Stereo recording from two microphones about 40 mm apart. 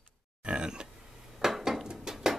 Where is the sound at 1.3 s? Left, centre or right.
Centre.